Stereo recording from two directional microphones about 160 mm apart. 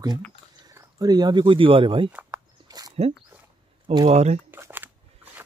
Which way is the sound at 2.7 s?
25° right (ahead or behind).